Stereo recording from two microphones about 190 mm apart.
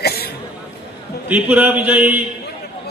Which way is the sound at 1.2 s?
5° right (ahead or behind).